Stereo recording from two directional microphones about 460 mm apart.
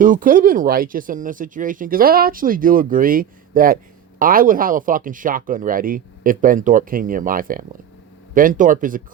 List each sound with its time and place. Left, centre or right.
0.0 s speech: centre